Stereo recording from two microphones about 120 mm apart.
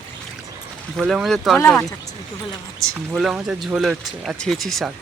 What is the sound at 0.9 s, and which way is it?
Speech, 5° right (ahead or behind).